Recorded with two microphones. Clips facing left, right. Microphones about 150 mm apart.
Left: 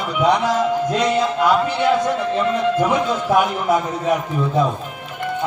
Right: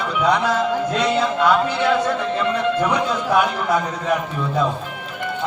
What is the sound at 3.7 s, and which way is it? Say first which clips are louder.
A man's voice: left 2 dB; 15° left (ahead or behind).